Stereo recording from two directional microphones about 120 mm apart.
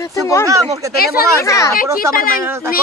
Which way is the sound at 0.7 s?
25° right (ahead or behind).